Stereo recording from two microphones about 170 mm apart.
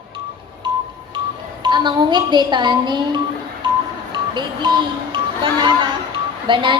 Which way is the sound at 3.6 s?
30° right (ahead or behind).